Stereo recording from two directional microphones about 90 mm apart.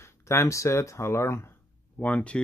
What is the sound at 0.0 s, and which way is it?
Speech, 35° left (ahead or behind).